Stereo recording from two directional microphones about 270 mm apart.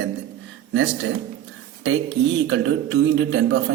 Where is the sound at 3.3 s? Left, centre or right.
Right.